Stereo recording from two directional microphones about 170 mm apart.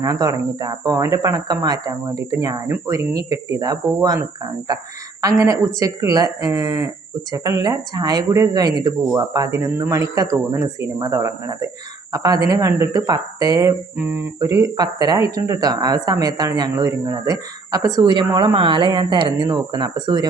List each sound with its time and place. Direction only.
0.0 s speech: 25° right (ahead or behind)
5.2 s speech: 20° right (ahead or behind)